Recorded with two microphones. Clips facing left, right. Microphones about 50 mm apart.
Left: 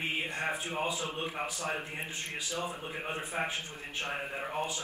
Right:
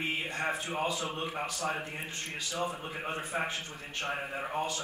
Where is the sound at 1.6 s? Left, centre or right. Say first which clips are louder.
Right 1 dB; centre.